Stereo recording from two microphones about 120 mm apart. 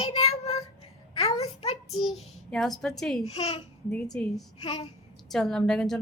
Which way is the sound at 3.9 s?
5° left (ahead or behind).